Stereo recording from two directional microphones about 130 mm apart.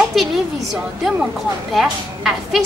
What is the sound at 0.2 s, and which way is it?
Speech, centre (ahead or behind).